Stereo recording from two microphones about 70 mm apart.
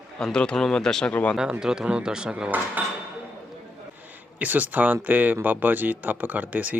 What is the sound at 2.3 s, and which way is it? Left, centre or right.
Speech, right.